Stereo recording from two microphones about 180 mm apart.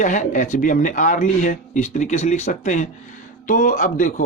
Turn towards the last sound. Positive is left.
turn(degrees=45)  # may be behind; listen again after turning